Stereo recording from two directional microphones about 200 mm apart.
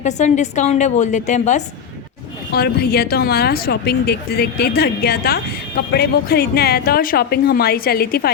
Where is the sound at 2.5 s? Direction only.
50° left (ahead or behind).